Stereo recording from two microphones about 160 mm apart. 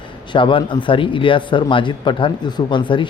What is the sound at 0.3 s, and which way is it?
Speech, 30° left (ahead or behind).